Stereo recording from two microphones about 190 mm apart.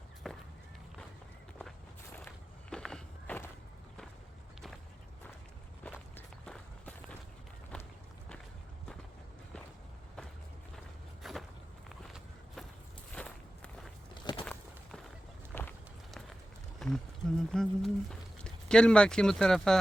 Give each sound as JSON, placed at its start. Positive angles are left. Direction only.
{"t": 0.2, "sound": "run", "side_deg": 0}
{"t": 2.1, "sound": "walk", "side_deg": 5}
{"t": 5.8, "sound": "walk", "side_deg": 5}
{"t": 11.2, "sound": "walk", "side_deg": 0}
{"t": 13.1, "sound": "walk", "side_deg": 5}
{"t": 14.1, "sound": "a sound", "side_deg": 25}
{"t": 14.4, "sound": "walk", "side_deg": 5}
{"t": 15.5, "sound": "run", "side_deg": 10}
{"t": 16.8, "sound": "speech", "side_deg": 5}